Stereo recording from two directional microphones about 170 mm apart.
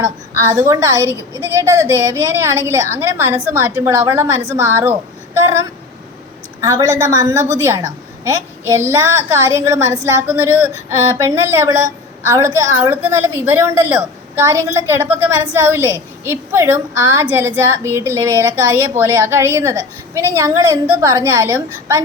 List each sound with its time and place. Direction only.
0.0 s a woman's voice: 15° right (ahead or behind)
6.6 s a woman's voice: 20° right (ahead or behind)